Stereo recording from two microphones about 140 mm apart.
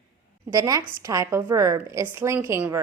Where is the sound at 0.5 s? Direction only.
25° right (ahead or behind).